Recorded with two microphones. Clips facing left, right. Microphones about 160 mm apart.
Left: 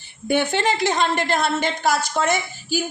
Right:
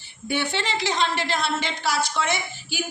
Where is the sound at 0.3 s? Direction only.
50° left (ahead or behind).